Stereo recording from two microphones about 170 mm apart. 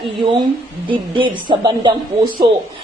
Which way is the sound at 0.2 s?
30° right (ahead or behind).